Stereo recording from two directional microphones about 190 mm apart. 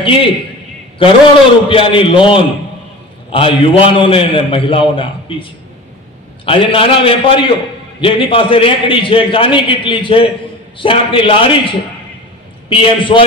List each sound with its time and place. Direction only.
0.0 s a man's voice: 30° left (ahead or behind)
1.7 s a man's voice: 30° left (ahead or behind)